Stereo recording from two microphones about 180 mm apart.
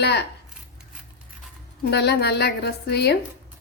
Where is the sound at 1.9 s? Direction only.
65° left (ahead or behind).